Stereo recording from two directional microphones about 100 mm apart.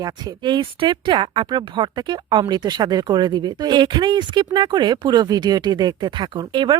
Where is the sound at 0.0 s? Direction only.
50° right (ahead or behind).